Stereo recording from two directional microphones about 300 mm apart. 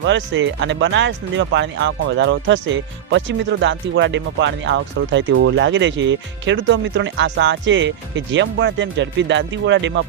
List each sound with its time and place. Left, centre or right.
0.0 s speech: right